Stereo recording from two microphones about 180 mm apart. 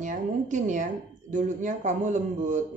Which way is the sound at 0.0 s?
45° right (ahead or behind).